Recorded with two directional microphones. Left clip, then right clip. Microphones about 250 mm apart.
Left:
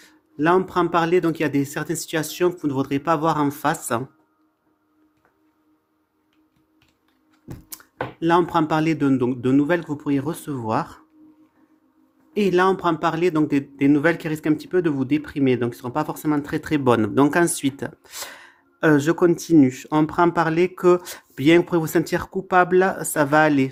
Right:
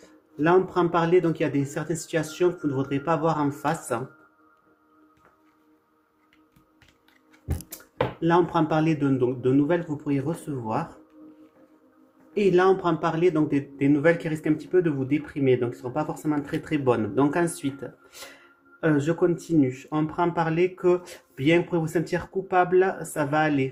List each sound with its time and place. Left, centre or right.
0.3 s a man's voice: left
8.2 s a man's voice: left
12.3 s a man's voice: left